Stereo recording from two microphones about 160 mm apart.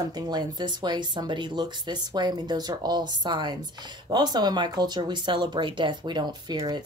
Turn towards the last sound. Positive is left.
turn(degrees=-25)  # may be behind; listen again after turning